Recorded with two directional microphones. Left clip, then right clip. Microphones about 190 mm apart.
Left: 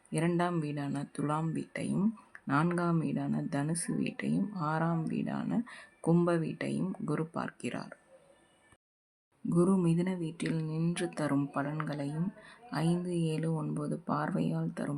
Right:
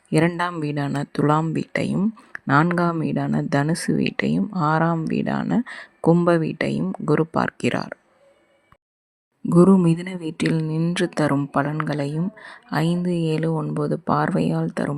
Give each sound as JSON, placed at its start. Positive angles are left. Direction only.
{"t": 0.1, "sound": "speech", "side_deg": -45}
{"t": 9.5, "sound": "speech", "side_deg": -45}